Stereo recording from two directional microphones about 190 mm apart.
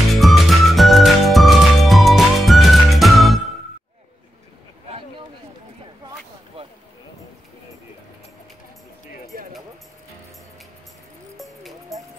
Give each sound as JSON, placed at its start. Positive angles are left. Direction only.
{"t": 0.1, "sound": "music", "side_deg": 0}
{"t": 9.3, "sound": "music", "side_deg": -50}
{"t": 11.3, "sound": "music", "side_deg": 0}